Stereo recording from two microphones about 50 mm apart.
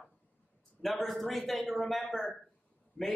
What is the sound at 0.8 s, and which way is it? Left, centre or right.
A woman's voice, centre.